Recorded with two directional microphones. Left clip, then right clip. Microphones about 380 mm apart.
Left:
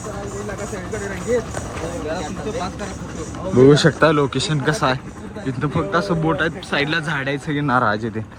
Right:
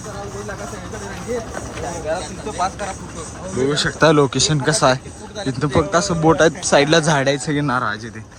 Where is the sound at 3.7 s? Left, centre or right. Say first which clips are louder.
Right 1 dB; centre.